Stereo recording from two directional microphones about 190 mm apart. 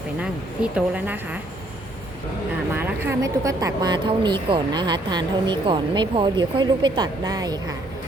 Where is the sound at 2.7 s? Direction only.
10° right (ahead or behind).